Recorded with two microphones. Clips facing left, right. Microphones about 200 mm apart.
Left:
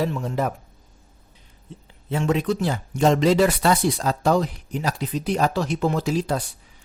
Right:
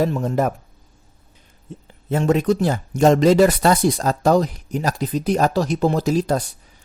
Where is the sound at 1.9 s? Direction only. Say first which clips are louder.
Right 4 dB; 45° right (ahead or behind).